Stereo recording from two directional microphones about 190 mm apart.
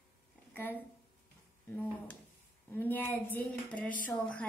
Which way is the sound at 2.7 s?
10° left (ahead or behind).